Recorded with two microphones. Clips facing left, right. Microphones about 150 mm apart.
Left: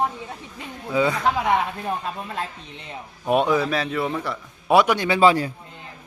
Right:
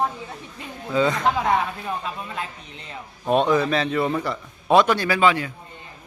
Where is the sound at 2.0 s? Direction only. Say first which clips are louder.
Left 1 dB; 40° left (ahead or behind).